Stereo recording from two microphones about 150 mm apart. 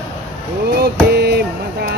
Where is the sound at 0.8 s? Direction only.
90° right.